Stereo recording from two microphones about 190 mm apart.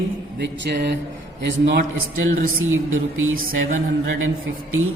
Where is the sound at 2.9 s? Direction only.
90° right.